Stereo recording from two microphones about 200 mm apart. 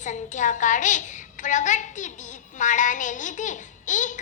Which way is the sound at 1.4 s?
40° left (ahead or behind).